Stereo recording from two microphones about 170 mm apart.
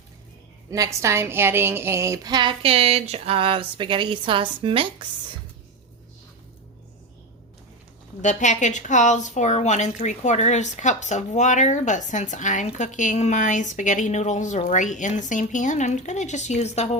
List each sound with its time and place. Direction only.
0.7 s a woman's voice: 20° right (ahead or behind)
8.2 s a woman's voice: 45° left (ahead or behind)